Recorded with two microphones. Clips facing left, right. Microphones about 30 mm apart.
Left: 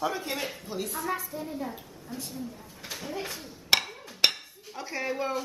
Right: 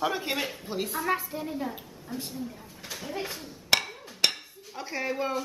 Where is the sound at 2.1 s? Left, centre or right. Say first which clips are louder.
Right 3 dB; centre.